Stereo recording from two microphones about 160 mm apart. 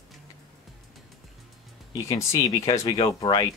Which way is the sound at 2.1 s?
20° left (ahead or behind).